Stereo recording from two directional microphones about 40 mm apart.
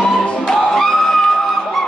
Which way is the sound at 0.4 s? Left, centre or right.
Centre.